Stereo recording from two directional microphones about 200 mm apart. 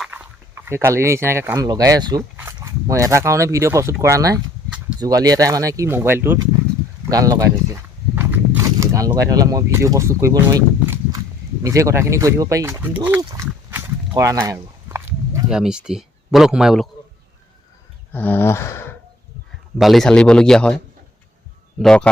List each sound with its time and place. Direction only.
0.0 s speech: 10° right (ahead or behind)
7.1 s walk: 15° right (ahead or behind)
11.6 s speech: 15° right (ahead or behind)
13.1 s a sound: 10° right (ahead or behind)
15.5 s speech: 5° right (ahead or behind)
18.1 s a sound: 10° left (ahead or behind)
19.8 s speech: centre (ahead or behind)